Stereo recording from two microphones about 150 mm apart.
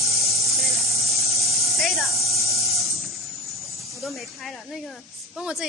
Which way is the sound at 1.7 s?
Centre (ahead or behind).